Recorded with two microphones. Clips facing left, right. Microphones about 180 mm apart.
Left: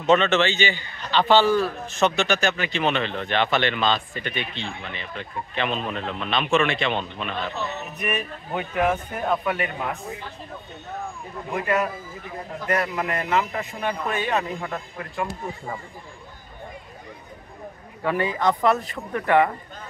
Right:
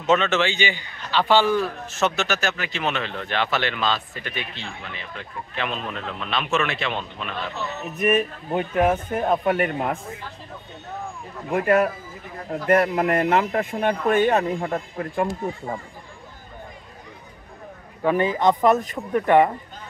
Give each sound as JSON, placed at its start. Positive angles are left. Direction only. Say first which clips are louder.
{"t": 0.0, "sound": "a man's voice", "louder": "left 1 dB", "side_deg": -5}
{"t": 8.0, "sound": "a man's voice", "louder": "right 9 dB", "side_deg": -45}
{"t": 11.5, "sound": "speech", "louder": "right 5 dB", "side_deg": -50}
{"t": 14.6, "sound": "a man's voice", "louder": "right 5 dB", "side_deg": -35}
{"t": 18.0, "sound": "speech", "louder": "right 3 dB", "side_deg": -20}